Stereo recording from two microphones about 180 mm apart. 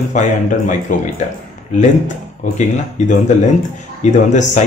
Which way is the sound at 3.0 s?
40° left (ahead or behind).